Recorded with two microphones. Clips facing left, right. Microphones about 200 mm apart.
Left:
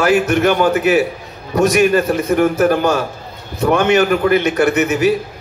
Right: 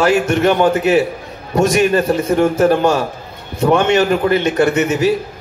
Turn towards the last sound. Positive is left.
turn(degrees=-30)  # may be behind; listen again after turning